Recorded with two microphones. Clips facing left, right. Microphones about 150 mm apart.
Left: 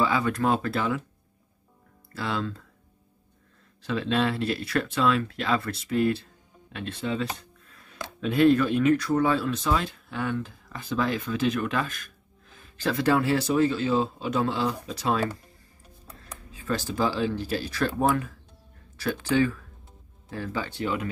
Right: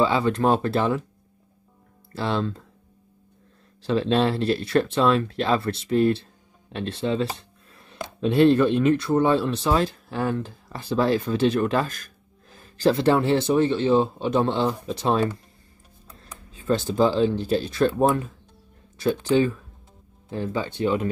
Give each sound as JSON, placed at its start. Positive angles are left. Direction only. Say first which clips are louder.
{"t": 0.0, "sound": "speech", "louder": "right 4 dB", "side_deg": -25}
{"t": 2.1, "sound": "speech", "louder": "right 5 dB", "side_deg": -30}
{"t": 3.8, "sound": "speech", "louder": "right 5 dB", "side_deg": -30}
{"t": 7.3, "sound": "a sound", "louder": "right 1 dB", "side_deg": -30}
{"t": 8.2, "sound": "speech", "louder": "right 3 dB", "side_deg": -30}
{"t": 16.5, "sound": "speech", "louder": "right 6 dB", "side_deg": -25}